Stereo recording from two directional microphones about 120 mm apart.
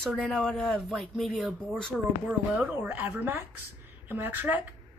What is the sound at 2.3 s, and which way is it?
Speech, 10° right (ahead or behind).